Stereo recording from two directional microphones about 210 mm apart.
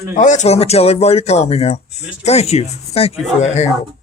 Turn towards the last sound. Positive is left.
turn(degrees=35)  # may be behind; listen again after turning